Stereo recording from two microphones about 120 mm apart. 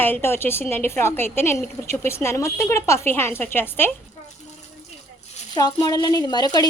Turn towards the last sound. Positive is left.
turn(degrees=35)  # may be behind; listen again after turning